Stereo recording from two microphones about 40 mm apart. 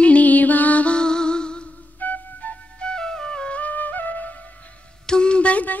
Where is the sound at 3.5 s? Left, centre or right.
Left.